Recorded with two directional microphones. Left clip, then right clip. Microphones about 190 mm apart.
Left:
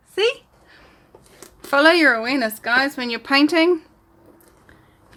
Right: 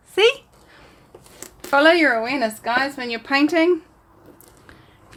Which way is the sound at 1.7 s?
20° left (ahead or behind).